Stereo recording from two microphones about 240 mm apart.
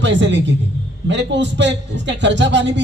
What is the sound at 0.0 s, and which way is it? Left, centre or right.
A man's voice, right.